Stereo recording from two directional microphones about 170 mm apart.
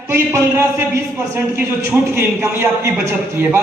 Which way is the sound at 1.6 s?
15° right (ahead or behind).